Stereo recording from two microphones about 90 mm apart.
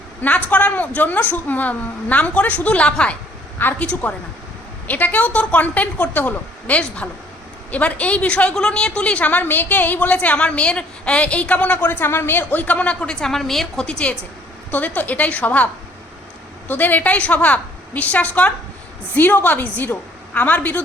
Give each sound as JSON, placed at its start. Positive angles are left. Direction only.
{"t": 0.2, "sound": "a woman's voice", "side_deg": 20}